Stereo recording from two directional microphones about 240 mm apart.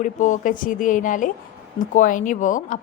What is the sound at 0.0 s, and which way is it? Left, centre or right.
A woman's voice, left.